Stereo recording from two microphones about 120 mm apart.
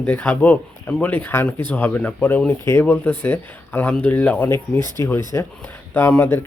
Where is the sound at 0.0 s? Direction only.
15° left (ahead or behind).